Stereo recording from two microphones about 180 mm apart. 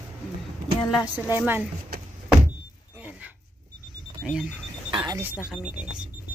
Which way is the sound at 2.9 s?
10° right (ahead or behind).